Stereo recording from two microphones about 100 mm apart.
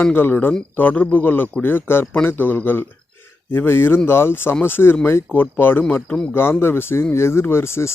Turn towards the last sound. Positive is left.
turn(degrees=25)  # may be behind; listen again after turning